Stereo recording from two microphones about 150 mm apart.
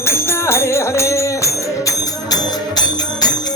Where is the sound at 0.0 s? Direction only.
15° left (ahead or behind).